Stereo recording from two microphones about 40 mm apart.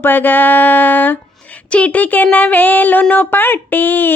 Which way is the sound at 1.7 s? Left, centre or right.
Left.